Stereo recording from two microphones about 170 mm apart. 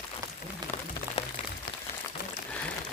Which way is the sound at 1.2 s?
35° left (ahead or behind).